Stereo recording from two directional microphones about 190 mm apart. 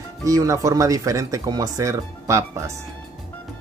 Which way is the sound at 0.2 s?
15° right (ahead or behind).